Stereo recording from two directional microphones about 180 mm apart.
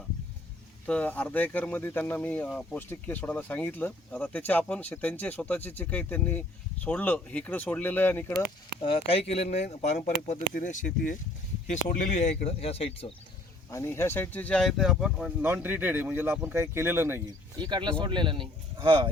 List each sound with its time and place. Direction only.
0.9 s speech: 10° left (ahead or behind)
8.8 s speech: 30° left (ahead or behind)
13.7 s speech: 15° left (ahead or behind); by 17.2 s 15° right (ahead or behind)
17.6 s speech: 25° right (ahead or behind)